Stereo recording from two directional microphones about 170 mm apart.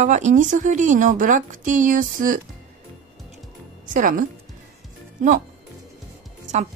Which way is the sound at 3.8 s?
50° right (ahead or behind).